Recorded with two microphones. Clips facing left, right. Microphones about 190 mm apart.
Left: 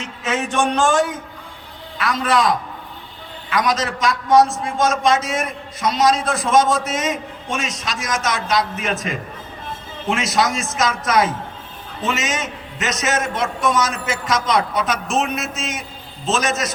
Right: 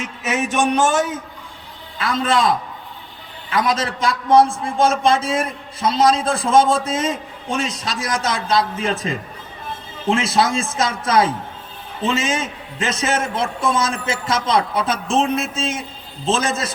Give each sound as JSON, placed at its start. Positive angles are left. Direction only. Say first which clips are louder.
{"t": 0.5, "sound": "a man's voice", "louder": "right 1 dB", "side_deg": -20}
{"t": 2.0, "sound": "a man's voice", "louder": "even", "side_deg": -25}